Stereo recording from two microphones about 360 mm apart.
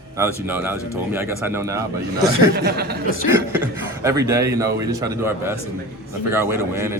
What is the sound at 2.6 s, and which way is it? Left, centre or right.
Speech, right.